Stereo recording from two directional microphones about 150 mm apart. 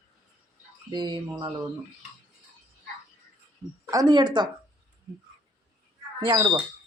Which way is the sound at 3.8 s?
25° right (ahead or behind).